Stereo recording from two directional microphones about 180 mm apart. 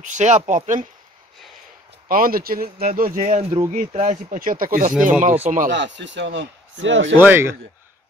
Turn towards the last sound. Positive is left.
turn(degrees=-15)  # may be behind; listen again after turning